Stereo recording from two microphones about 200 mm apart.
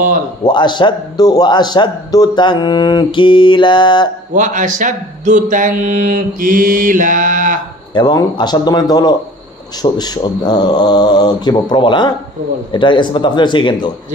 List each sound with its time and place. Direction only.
0.4 s a man's voice: 20° left (ahead or behind)
4.4 s speech: 40° right (ahead or behind)
7.9 s a man's voice: 20° left (ahead or behind)